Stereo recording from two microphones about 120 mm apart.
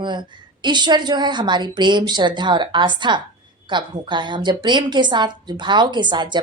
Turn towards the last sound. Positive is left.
turn(degrees=-40)  # may be behind; listen again after turning